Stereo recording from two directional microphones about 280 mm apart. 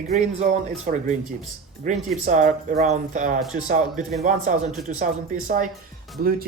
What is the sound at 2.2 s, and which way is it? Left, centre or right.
Speech, right.